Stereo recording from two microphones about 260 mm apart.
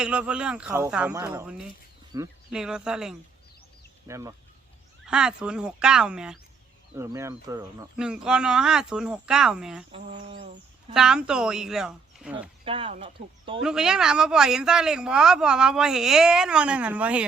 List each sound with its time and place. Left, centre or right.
0.0 s speech: centre
7.9 s speech: centre
9.9 s speech: right
10.9 s speech: centre
12.6 s speech: right
13.6 s speech: centre